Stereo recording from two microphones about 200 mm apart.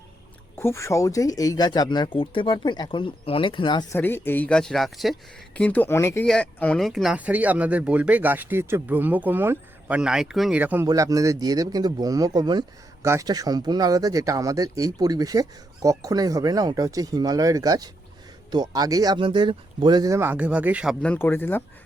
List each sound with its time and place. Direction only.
0.6 s speech: 15° left (ahead or behind)
3.9 s speech: 10° left (ahead or behind); by 20.9 s 5° right (ahead or behind)
21.0 s speech: 10° left (ahead or behind)